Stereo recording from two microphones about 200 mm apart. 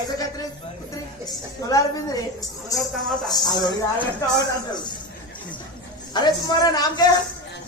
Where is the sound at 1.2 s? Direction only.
20° left (ahead or behind).